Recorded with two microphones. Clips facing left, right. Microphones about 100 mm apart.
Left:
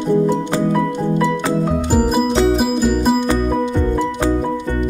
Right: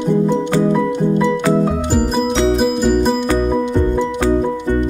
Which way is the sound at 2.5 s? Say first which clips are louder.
Right 2 dB; 5° left (ahead or behind).